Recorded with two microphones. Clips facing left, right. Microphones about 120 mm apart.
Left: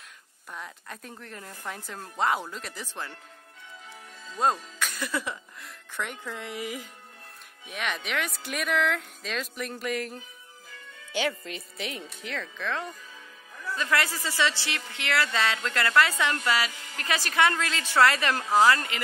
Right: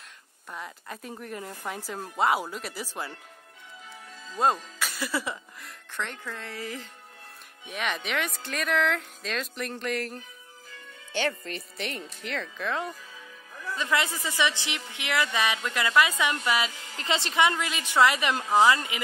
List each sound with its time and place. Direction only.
0.5 s music: centre (ahead or behind)
1.1 s speech: 10° right (ahead or behind)
4.4 s music: centre (ahead or behind)
5.9 s speech: 10° left (ahead or behind)
7.6 s music: centre (ahead or behind)
13.7 s speech: 20° right (ahead or behind)